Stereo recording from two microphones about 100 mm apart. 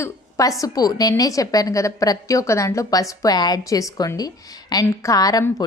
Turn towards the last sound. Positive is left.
turn(degrees=35)  # may be behind; listen again after turning